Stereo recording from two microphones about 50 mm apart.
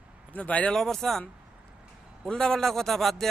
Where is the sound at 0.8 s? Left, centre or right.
Centre.